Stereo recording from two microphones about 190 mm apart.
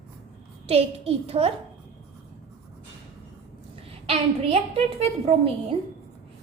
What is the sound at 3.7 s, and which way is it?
A woman's voice, 30° right (ahead or behind).